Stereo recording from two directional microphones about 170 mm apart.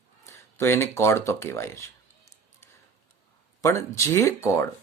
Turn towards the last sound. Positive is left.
turn(degrees=15)  # may be behind; listen again after turning